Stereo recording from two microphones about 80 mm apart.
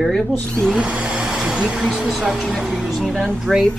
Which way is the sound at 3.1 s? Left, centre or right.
Centre.